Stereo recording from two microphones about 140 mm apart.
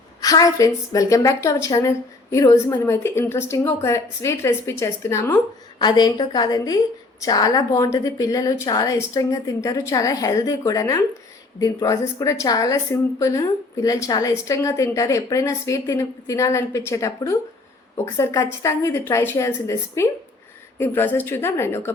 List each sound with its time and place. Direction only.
0.2 s a woman's voice: 25° left (ahead or behind)
5.8 s a woman's voice: 30° left (ahead or behind)